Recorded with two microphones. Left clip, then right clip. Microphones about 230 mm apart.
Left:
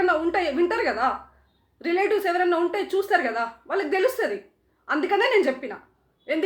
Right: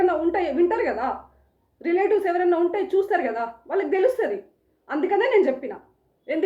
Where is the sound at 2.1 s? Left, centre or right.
Left.